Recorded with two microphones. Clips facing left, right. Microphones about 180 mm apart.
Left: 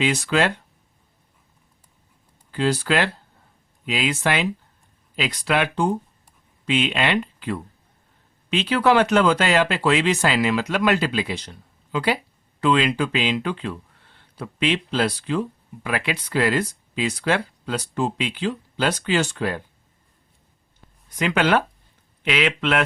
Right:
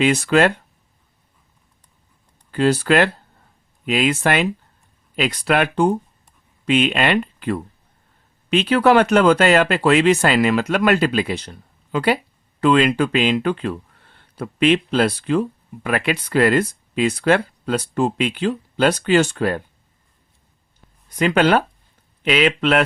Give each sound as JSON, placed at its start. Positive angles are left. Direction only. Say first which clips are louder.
{"t": 0.0, "sound": "speech", "louder": "right 5 dB", "side_deg": -55}
{"t": 2.5, "sound": "speech", "louder": "right 5 dB", "side_deg": -55}
{"t": 21.2, "sound": "speech", "louder": "right 4 dB", "side_deg": -40}